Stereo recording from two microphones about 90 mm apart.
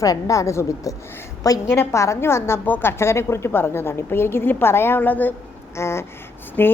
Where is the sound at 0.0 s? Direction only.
40° left (ahead or behind); by 5.3 s 20° left (ahead or behind).